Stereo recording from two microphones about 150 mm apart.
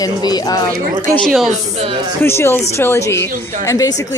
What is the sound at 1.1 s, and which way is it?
Speech, centre (ahead or behind).